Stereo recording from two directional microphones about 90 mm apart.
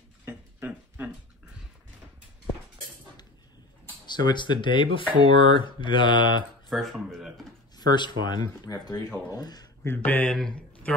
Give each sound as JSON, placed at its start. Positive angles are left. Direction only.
{"t": 0.2, "sound": "a sound", "side_deg": -25}
{"t": 4.1, "sound": "speech", "side_deg": 55}
{"t": 6.7, "sound": "speech", "side_deg": 0}
{"t": 7.7, "sound": "speech", "side_deg": 50}
{"t": 9.8, "sound": "speech", "side_deg": 20}
{"t": 10.3, "sound": "speech", "side_deg": 5}